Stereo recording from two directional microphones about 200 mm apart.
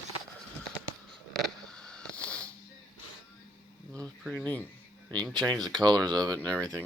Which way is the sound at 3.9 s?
5° left (ahead or behind).